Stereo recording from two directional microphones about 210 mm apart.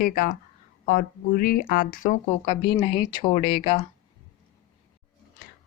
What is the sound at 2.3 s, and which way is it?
Speech, 25° left (ahead or behind).